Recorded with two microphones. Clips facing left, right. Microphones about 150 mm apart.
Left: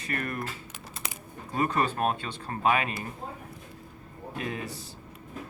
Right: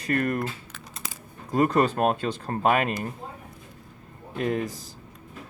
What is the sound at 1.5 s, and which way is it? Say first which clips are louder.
Speech: right 6 dB; 40° right (ahead or behind).